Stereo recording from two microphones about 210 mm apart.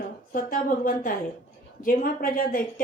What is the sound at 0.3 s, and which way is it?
A woman's voice, 40° left (ahead or behind).